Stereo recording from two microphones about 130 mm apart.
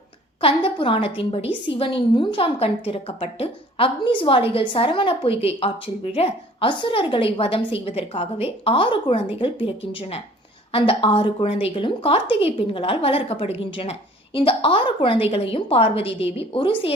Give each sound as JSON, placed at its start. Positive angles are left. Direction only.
{"t": 0.4, "sound": "a woman's voice", "side_deg": 40}